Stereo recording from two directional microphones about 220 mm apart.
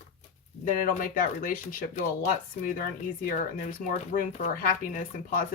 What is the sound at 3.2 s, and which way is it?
Speech, 40° left (ahead or behind).